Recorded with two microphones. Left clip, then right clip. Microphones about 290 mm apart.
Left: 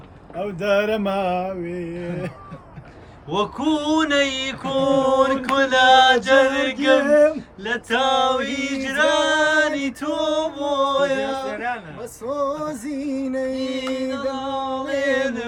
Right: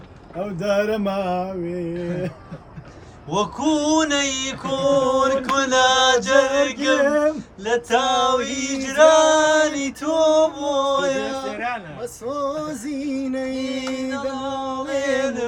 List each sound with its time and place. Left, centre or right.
0.6 s music: centre
3.2 s male singing: centre
7.0 s a sound: left
7.6 s male singing: centre
12.4 s music: centre
13.6 s male singing: centre